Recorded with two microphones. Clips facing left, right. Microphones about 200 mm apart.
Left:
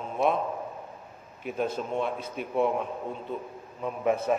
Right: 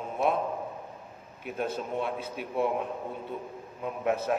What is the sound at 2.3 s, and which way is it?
Speech, 55° left (ahead or behind).